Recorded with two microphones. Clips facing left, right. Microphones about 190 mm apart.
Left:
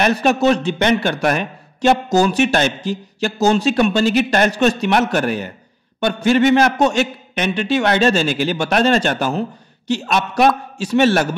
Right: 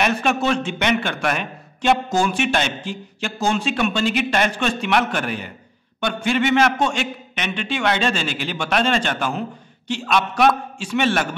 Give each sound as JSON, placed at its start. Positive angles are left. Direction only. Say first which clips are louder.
{"t": 0.0, "sound": "a man's voice", "louder": "left 5 dB", "side_deg": 35}